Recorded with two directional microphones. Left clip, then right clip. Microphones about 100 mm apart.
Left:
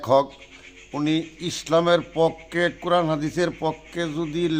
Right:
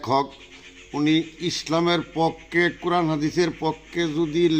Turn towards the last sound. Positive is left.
turn(degrees=45)  # may be behind; listen again after turning